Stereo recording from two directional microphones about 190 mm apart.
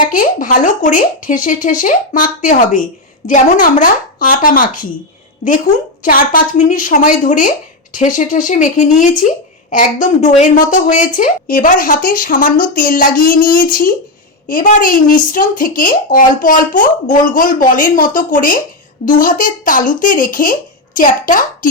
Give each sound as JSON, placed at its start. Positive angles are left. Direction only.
{"t": 0.1, "sound": "speech", "side_deg": 45}
{"t": 6.0, "sound": "a woman's voice", "side_deg": 45}